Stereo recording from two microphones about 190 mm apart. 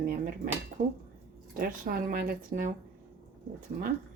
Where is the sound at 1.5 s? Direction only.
45° right (ahead or behind).